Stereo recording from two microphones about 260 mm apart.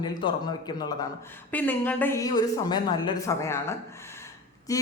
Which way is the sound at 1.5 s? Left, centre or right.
Centre.